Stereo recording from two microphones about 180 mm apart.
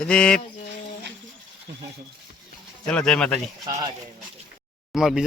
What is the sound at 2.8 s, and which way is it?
Speech, 5° left (ahead or behind).